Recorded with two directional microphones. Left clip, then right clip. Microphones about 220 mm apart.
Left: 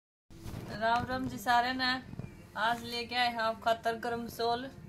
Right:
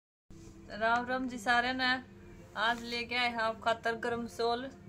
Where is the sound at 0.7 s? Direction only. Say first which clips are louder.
Even; 20° right (ahead or behind).